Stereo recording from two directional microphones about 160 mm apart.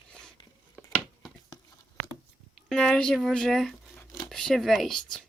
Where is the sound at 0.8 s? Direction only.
10° left (ahead or behind).